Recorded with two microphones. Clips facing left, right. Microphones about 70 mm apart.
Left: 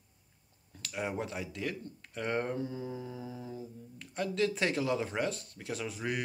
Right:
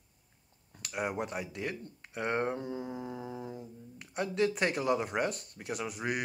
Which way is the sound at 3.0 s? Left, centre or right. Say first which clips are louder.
Right 2 dB; right.